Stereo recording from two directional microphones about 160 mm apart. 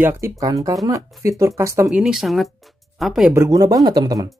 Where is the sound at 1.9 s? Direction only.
5° right (ahead or behind).